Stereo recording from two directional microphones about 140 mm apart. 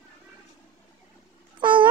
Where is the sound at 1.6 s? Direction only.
35° right (ahead or behind).